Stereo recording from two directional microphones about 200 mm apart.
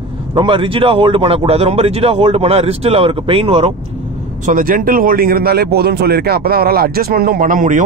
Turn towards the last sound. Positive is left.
turn(degrees=-40)  # may be behind; listen again after turning